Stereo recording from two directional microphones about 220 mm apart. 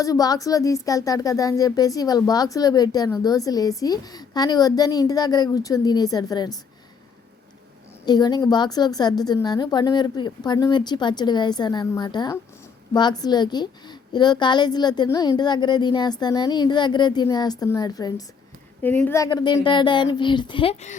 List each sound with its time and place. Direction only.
0.0 s speech: 15° left (ahead or behind)
8.0 s a woman's voice: 20° left (ahead or behind)